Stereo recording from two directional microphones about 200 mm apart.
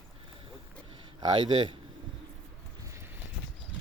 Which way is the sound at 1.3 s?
25° right (ahead or behind).